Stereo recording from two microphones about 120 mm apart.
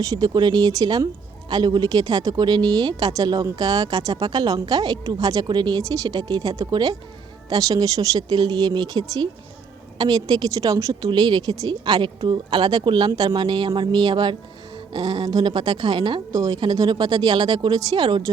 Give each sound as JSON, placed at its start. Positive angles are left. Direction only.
{"t": 0.0, "sound": "speech", "side_deg": -30}
{"t": 16.3, "sound": "a woman's voice", "side_deg": -30}